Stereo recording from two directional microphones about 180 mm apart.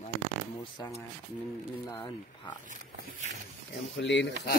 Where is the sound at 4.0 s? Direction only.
80° left.